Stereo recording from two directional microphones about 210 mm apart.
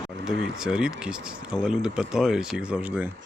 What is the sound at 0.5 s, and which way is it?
Speech, 5° right (ahead or behind).